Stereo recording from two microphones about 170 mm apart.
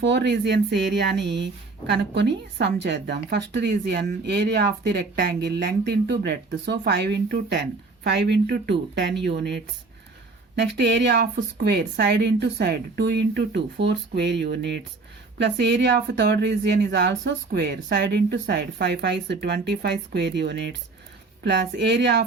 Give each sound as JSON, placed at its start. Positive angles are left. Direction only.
{"t": 0.0, "sound": "a woman's voice", "side_deg": -90}
{"t": 10.5, "sound": "speech", "side_deg": -85}
{"t": 11.6, "sound": "a woman's voice", "side_deg": -75}